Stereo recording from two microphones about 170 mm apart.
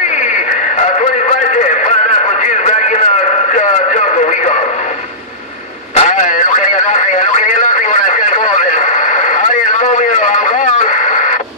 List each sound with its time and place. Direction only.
1.5 s music: 45° left (ahead or behind)
5.9 s radio: 45° left (ahead or behind)